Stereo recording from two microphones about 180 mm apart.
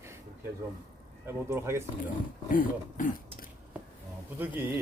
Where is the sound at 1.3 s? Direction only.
15° right (ahead or behind).